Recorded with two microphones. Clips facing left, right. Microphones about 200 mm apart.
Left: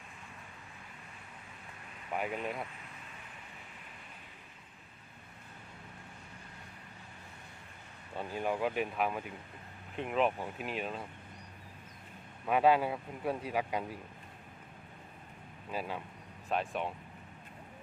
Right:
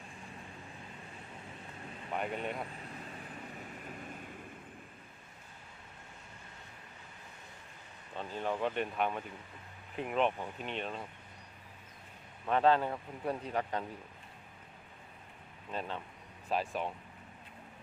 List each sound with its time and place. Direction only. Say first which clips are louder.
2.1 s speech: left 1 dB; 5° left (ahead or behind)
3.8 s vehicle: right 9 dB; 45° right (ahead or behind)
8.1 s speech: left 2 dB; 10° left (ahead or behind)
12.5 s speech: left 1 dB; 10° left (ahead or behind)
15.7 s speech: left 1 dB; 5° left (ahead or behind)